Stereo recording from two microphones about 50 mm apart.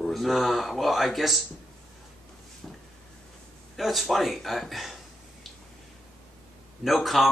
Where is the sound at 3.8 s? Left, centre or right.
Centre.